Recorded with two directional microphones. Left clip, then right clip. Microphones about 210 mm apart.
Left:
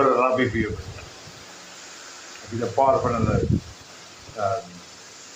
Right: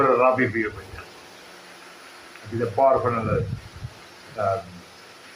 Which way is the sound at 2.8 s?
65° left (ahead or behind).